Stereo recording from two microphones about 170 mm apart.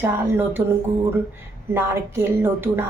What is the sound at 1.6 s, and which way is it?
Speech, 15° right (ahead or behind).